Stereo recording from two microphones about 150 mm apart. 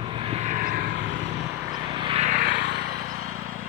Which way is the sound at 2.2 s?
60° right (ahead or behind).